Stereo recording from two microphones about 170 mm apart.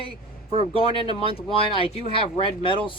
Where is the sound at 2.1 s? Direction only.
30° left (ahead or behind).